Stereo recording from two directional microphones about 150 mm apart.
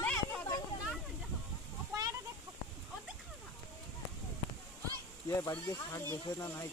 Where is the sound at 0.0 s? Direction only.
10° left (ahead or behind).